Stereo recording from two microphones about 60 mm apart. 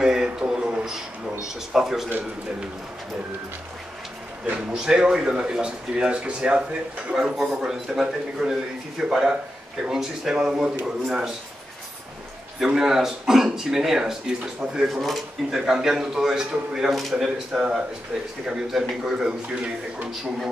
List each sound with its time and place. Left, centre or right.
0.0 s a sound: centre
1.4 s speech: centre
4.7 s speech: centre
12.5 s speech: centre